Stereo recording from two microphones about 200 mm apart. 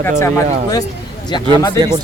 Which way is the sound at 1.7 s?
20° right (ahead or behind).